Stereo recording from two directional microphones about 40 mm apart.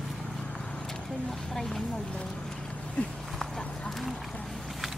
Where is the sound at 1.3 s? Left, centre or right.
Centre.